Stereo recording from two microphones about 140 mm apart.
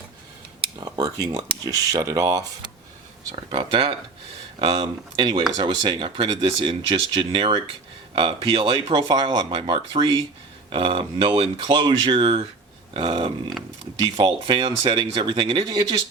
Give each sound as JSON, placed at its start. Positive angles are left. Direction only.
{"t": 0.8, "sound": "speech", "side_deg": -30}
{"t": 3.5, "sound": "speech", "side_deg": -40}